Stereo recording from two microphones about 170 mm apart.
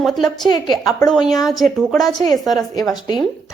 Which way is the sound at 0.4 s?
25° left (ahead or behind).